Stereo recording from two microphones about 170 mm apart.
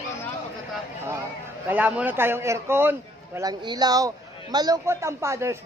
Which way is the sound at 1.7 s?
10° right (ahead or behind).